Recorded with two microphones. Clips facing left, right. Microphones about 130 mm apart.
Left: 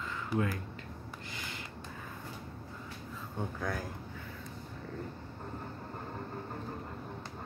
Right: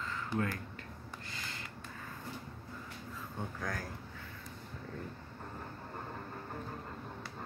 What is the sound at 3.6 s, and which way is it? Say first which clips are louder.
Speech: left 3 dB; 10° left (ahead or behind).